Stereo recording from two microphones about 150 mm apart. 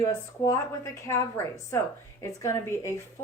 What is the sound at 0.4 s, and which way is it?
A woman's voice, 20° left (ahead or behind).